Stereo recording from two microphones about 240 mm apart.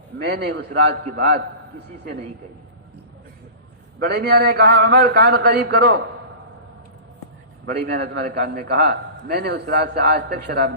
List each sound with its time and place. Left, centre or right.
0.2 s a man's voice: right
4.0 s a man's voice: right
7.6 s a man's voice: right